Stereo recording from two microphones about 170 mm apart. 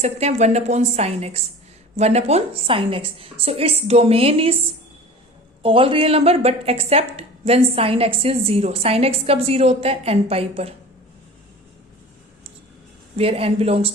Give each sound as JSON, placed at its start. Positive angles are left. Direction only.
{"t": 0.0, "sound": "a woman's voice", "side_deg": -40}
{"t": 5.6, "sound": "a woman's voice", "side_deg": -30}
{"t": 13.1, "sound": "a woman's voice", "side_deg": -35}